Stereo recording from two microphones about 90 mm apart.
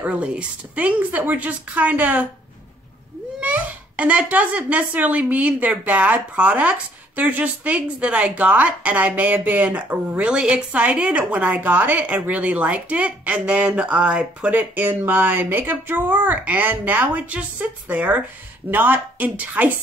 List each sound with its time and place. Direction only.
0.0 s a child's voice: 15° right (ahead or behind)
3.3 s a child's voice: 15° right (ahead or behind)